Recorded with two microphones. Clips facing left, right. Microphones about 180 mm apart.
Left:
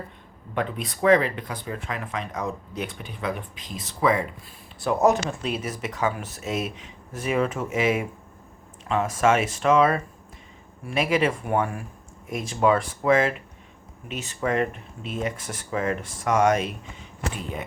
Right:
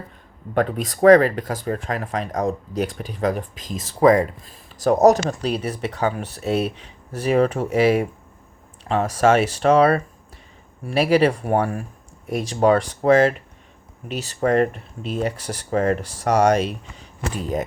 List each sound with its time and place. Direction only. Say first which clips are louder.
0.5 s speech: right 7 dB; 45° right (ahead or behind)